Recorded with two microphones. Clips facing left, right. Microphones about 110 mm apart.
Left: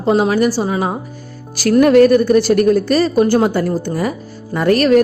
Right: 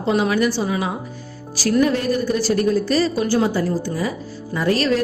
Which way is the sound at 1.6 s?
60° left (ahead or behind).